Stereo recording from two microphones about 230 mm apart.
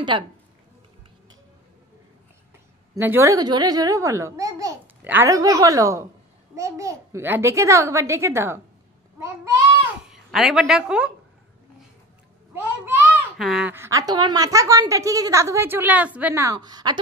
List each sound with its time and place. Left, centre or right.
0.1 s speech: right
3.0 s a child's voice: centre
10.0 s a woman's voice: centre
12.5 s a child's voice: centre